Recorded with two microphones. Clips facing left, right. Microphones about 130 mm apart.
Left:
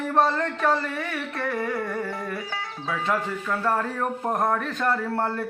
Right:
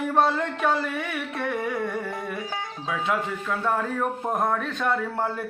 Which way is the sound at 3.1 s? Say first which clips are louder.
Left 1 dB; centre (ahead or behind).